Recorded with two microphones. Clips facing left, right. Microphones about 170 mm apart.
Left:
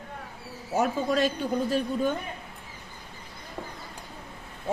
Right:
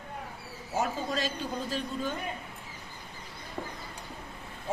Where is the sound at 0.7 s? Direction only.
60° left (ahead or behind).